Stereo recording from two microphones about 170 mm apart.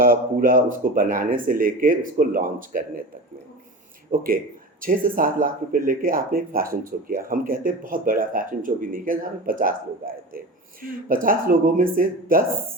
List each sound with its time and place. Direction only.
0.0 s speech: 55° right (ahead or behind)
4.1 s speech: 55° right (ahead or behind)